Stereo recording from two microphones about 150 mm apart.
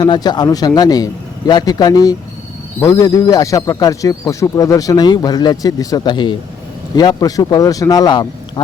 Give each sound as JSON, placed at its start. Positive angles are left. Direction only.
{"t": 0.0, "sound": "speech", "side_deg": 30}